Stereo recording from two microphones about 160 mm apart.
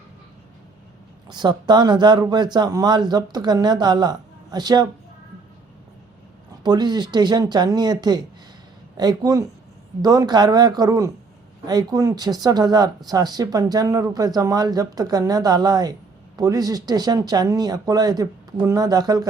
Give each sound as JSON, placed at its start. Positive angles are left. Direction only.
{"t": 1.3, "sound": "speech", "side_deg": -25}
{"t": 6.6, "sound": "speech", "side_deg": -25}